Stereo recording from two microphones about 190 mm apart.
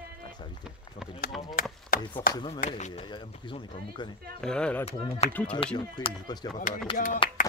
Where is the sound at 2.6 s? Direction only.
40° left (ahead or behind).